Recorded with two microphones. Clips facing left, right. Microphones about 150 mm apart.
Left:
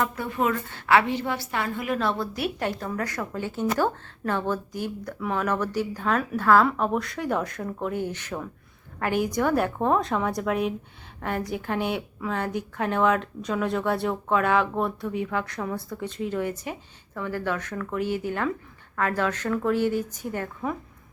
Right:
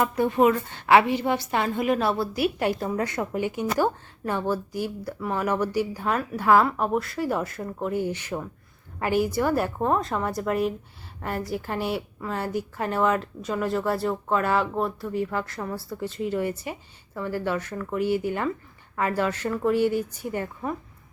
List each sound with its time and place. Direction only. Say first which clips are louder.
0.3 s a woman's voice: right 5 dB; 20° right (ahead or behind)
2.0 s speech: right 3 dB; 10° right (ahead or behind)
2.9 s a woman's voice: right 3 dB; 20° right (ahead or behind)